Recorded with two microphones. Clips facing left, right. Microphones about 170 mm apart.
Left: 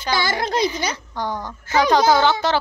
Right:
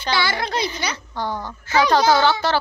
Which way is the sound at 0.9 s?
15° left (ahead or behind).